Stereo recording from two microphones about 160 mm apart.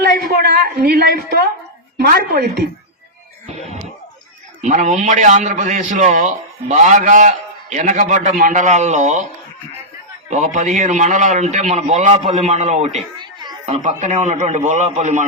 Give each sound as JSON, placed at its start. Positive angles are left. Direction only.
{"t": 0.0, "sound": "a woman's voice", "side_deg": -85}
{"t": 4.6, "sound": "a man's voice", "side_deg": -50}
{"t": 10.2, "sound": "a man's voice", "side_deg": -50}
{"t": 13.1, "sound": "a sound", "side_deg": -25}
{"t": 13.7, "sound": "a man's voice", "side_deg": -45}